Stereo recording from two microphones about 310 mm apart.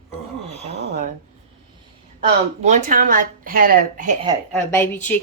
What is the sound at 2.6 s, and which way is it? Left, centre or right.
A woman's voice, right.